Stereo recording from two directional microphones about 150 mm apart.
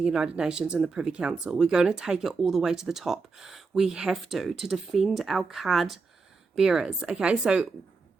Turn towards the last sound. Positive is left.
turn(degrees=-5)  # may be behind; listen again after turning